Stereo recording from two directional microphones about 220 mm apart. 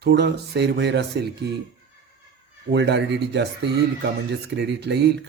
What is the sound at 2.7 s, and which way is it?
Speech, 50° right (ahead or behind).